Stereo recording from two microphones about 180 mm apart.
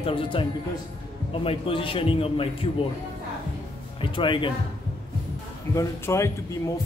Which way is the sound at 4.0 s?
30° left (ahead or behind).